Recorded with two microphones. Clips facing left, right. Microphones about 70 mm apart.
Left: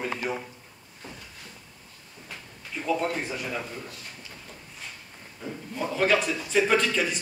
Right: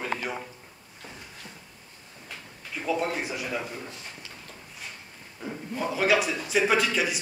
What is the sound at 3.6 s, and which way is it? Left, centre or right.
Speech, centre.